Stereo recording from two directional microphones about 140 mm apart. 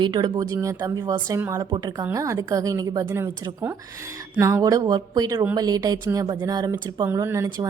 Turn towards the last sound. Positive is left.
turn(degrees=-20)  # may be behind; listen again after turning